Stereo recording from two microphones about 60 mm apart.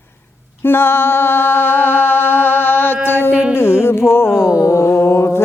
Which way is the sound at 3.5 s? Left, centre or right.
Left.